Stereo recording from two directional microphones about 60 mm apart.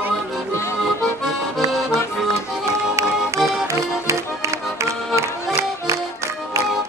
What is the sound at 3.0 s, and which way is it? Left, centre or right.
Music, right.